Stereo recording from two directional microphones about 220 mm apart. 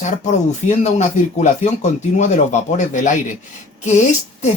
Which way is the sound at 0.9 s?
35° left (ahead or behind).